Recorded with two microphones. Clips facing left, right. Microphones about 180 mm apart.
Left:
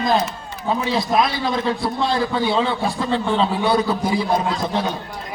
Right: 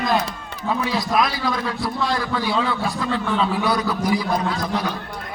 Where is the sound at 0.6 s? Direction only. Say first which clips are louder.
Left 2 dB; 25° left (ahead or behind).